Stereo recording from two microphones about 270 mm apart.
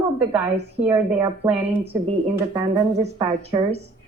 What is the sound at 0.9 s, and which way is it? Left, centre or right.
Speech, centre.